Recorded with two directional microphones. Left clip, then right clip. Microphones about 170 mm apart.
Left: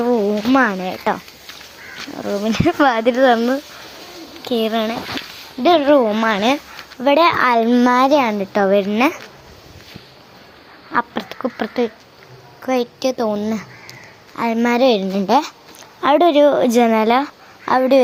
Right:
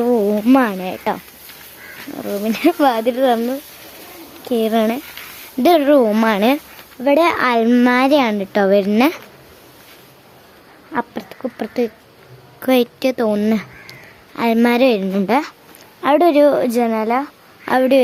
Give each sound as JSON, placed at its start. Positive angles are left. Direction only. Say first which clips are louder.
{"t": 0.0, "sound": "a sound", "louder": "right 1 dB", "side_deg": -10}
{"t": 0.6, "sound": "speech", "louder": "left 2 dB", "side_deg": -10}
{"t": 2.2, "sound": "a woman's voice", "louder": "right 1 dB", "side_deg": -5}
{"t": 4.4, "sound": "speech", "louder": "right 1 dB", "side_deg": -15}
{"t": 4.7, "sound": "a child's voice", "louder": "right 2 dB", "side_deg": -30}
{"t": 10.9, "sound": "insect", "louder": "left 3 dB", "side_deg": -15}
{"t": 11.5, "sound": "a child's voice", "louder": "even", "side_deg": -20}
{"t": 13.0, "sound": "a child's voice", "louder": "right 2 dB", "side_deg": -25}
{"t": 13.4, "sound": "speech", "louder": "right 4 dB", "side_deg": -40}
{"t": 14.8, "sound": "speech", "louder": "left 4 dB", "side_deg": -15}
{"t": 15.0, "sound": "a woman's voice", "louder": "left 1 dB", "side_deg": -5}
{"t": 17.7, "sound": "speech", "louder": "even", "side_deg": -15}